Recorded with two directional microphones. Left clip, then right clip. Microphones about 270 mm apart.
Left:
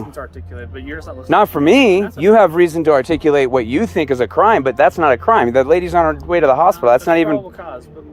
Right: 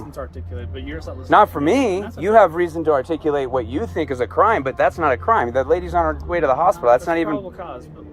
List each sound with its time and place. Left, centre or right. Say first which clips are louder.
0.9 s speech: left 3 dB; centre
1.3 s speech: left 3 dB; left